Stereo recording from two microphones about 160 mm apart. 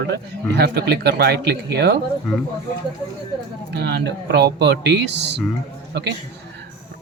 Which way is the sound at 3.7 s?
90° right.